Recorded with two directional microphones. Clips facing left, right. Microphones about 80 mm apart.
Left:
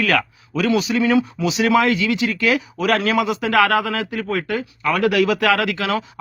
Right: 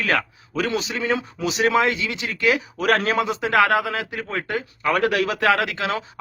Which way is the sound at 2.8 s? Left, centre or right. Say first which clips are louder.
Left 1 dB; right.